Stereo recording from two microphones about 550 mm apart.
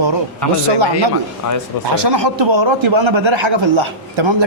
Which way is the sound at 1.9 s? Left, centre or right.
Right.